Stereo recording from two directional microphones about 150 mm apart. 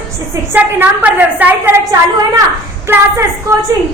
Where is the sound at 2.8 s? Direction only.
20° right (ahead or behind).